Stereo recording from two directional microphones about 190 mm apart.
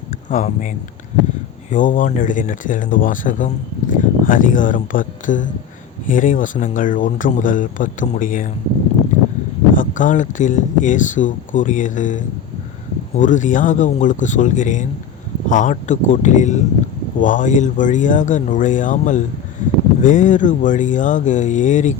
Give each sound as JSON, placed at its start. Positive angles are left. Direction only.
{"t": 0.3, "sound": "speech", "side_deg": 40}
{"t": 9.7, "sound": "speech", "side_deg": 45}